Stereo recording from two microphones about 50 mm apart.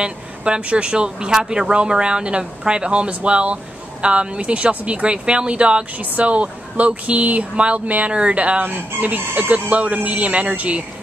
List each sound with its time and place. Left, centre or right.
0.0 s speech: right